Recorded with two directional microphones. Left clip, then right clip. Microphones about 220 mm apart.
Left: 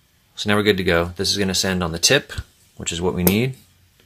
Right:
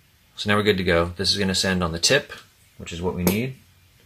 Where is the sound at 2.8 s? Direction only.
45° left (ahead or behind).